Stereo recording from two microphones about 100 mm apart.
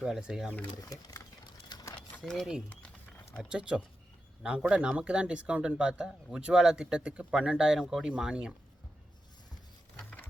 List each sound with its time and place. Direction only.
0.0 s speech: 5° right (ahead or behind)
1.7 s a sound: 35° left (ahead or behind)
2.3 s speech: centre (ahead or behind)
3.5 s speech: 10° right (ahead or behind)
10.0 s patter: 15° left (ahead or behind)